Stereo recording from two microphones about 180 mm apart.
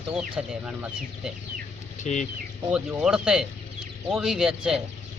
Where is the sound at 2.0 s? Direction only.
40° left (ahead or behind).